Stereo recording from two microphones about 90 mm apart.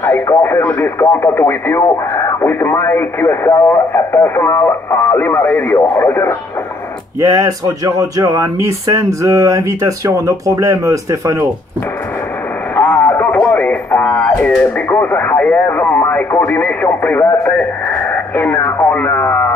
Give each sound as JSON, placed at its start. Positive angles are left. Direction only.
{"t": 0.0, "sound": "radio", "side_deg": 30}
{"t": 7.2, "sound": "speech", "side_deg": -40}
{"t": 12.8, "sound": "a sound", "side_deg": 30}
{"t": 13.2, "sound": "music", "side_deg": 25}
{"t": 14.6, "sound": "speech", "side_deg": 20}
{"t": 17.4, "sound": "radio", "side_deg": 15}